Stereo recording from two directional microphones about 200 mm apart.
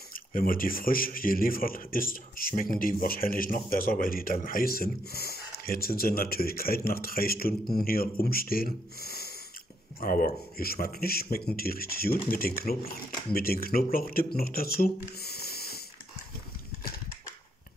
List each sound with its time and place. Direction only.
0.1 s speech: 45° left (ahead or behind)